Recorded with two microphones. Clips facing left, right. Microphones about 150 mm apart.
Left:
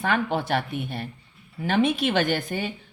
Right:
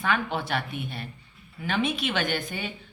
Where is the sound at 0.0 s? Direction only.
40° left (ahead or behind).